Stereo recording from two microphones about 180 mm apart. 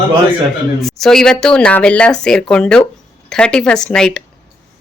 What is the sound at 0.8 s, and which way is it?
Speech, centre (ahead or behind).